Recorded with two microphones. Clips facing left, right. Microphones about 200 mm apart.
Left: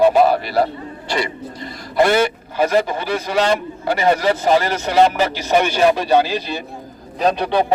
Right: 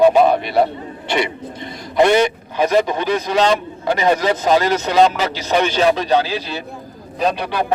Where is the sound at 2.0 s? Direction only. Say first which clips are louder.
Right 2 dB; 20° right (ahead or behind).